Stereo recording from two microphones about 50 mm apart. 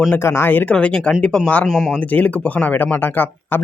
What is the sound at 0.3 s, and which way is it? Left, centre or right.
Speech, left.